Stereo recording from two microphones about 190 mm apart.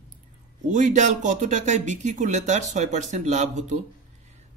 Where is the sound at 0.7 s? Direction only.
40° right (ahead or behind).